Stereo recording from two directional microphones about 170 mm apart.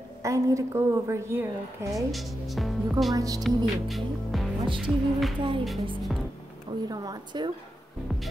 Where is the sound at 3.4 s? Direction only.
Centre (ahead or behind).